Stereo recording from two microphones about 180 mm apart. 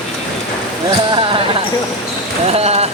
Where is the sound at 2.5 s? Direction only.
35° right (ahead or behind).